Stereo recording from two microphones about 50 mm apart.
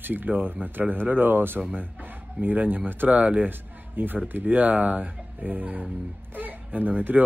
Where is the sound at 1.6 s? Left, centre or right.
Right.